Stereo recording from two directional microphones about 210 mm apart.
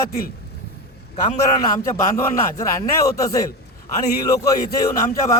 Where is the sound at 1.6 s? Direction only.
15° left (ahead or behind).